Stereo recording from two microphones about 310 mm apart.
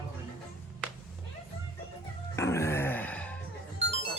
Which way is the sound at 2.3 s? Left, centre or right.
Centre.